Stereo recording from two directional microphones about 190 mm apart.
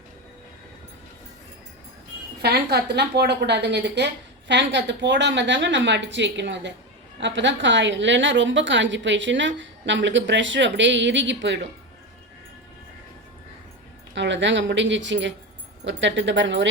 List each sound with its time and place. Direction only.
2.4 s a woman's voice: 60° right (ahead or behind)
14.2 s a woman's voice: 70° right (ahead or behind)